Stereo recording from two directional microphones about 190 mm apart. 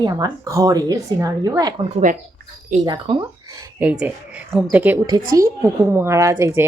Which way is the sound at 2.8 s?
20° right (ahead or behind).